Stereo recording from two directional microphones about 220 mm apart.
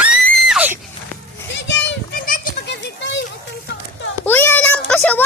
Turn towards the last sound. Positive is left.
turn(degrees=5)  # may be behind; listen again after turning